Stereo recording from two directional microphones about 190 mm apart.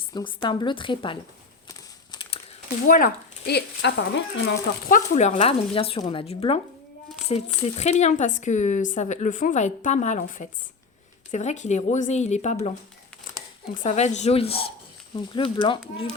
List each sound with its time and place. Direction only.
0.1 s speech: 25° left (ahead or behind)
2.8 s speech: 45° left (ahead or behind); by 4.5 s 70° left (ahead or behind)
4.9 s speech: 40° left (ahead or behind)
13.8 s speech: 35° left (ahead or behind)